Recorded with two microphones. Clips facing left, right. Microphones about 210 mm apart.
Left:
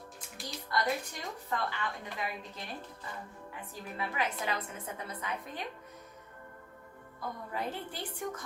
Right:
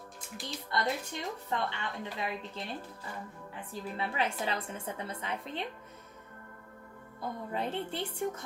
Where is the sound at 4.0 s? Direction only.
30° right (ahead or behind).